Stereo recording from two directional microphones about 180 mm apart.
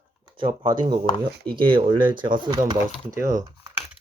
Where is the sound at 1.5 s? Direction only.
30° right (ahead or behind).